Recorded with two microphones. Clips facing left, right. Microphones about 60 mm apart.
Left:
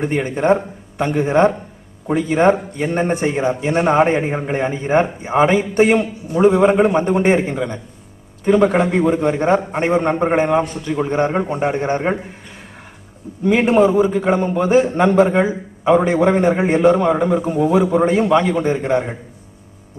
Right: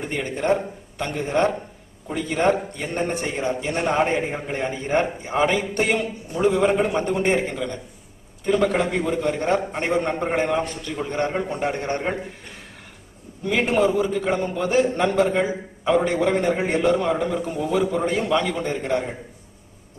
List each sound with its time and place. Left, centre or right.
0.1 s a man's voice: centre
13.4 s a man's voice: left